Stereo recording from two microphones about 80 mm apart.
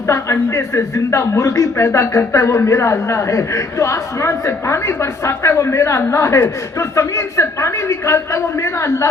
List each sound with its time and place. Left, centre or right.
0.1 s speech: left